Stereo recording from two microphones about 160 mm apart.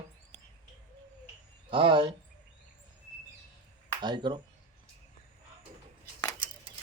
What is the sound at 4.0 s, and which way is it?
Speech, 30° right (ahead or behind).